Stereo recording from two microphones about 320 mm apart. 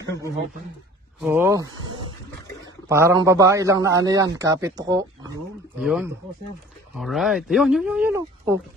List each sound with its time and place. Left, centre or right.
1.2 s speech: centre
2.9 s speech: centre